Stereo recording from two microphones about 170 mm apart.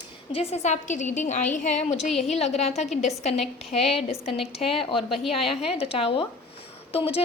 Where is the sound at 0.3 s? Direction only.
40° left (ahead or behind).